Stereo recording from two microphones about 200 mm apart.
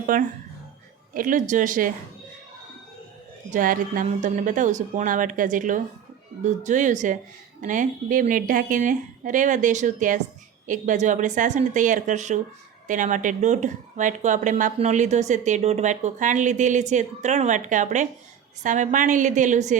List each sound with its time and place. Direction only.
0.1 s a woman's voice: 45° right (ahead or behind)
3.5 s a woman's voice: 40° right (ahead or behind)